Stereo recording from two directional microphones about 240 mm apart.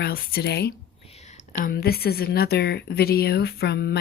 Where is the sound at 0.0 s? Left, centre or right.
Left.